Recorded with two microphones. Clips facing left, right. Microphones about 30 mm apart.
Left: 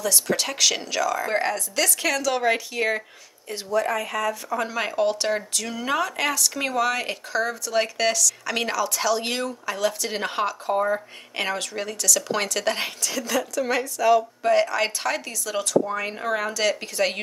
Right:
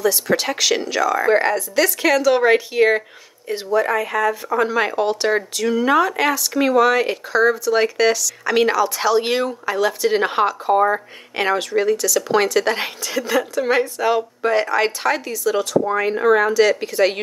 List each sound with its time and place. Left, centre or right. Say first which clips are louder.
0.0 s speech: right 6 dB; centre
11.4 s speech: right 11 dB; centre; by 14.2 s right
14.4 s speech: right 3 dB; centre
15.8 s speech: right 9 dB; centre